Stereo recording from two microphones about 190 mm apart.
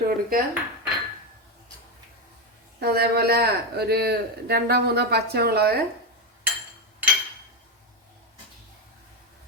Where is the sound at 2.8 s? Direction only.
55° right (ahead or behind).